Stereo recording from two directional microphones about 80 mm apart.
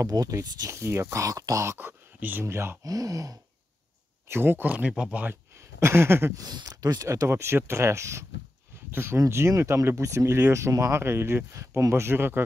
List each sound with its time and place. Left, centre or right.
0.0 s speech: right
1.1 s speech: right
1.8 s speech: right
2.4 s speech: right
2.8 s speech: right
4.3 s speech: right
5.8 s speech: right
6.3 s speech: right